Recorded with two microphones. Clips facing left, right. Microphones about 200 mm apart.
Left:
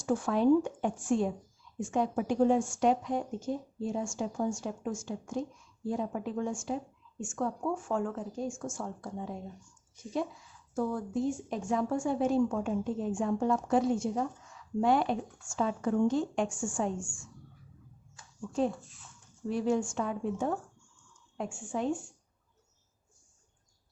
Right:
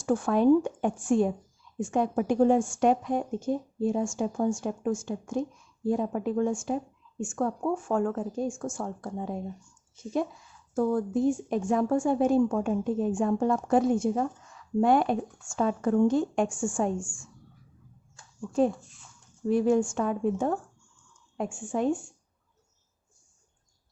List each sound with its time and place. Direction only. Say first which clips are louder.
0.0 s a woman's voice: right 4 dB; 55° right (ahead or behind)
10.8 s a woman's voice: right 6 dB; 55° right (ahead or behind)
19.5 s a woman's voice: right 6 dB; 55° right (ahead or behind)